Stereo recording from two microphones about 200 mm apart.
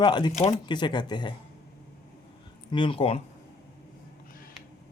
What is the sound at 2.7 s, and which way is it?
Speech, 25° left (ahead or behind).